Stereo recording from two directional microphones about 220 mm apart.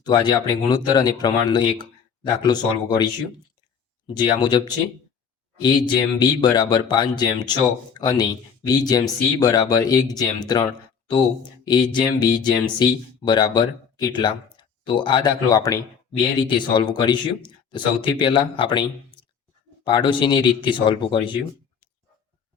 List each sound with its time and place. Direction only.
0.0 s speech: 20° left (ahead or behind)